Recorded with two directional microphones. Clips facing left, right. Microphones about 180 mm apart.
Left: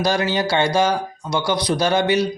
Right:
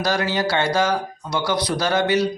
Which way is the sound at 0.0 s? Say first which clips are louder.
Left 2 dB; 20° left (ahead or behind).